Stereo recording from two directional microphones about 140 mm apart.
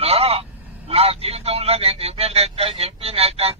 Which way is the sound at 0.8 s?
45° right (ahead or behind).